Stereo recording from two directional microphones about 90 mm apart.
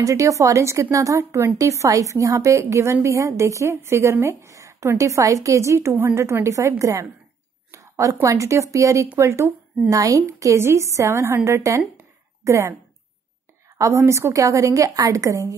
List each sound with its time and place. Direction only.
0.0 s a woman's voice: 35° right (ahead or behind)
13.7 s a woman's voice: 35° right (ahead or behind)